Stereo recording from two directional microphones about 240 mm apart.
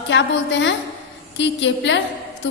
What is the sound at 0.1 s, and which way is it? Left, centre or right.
A woman's voice, left.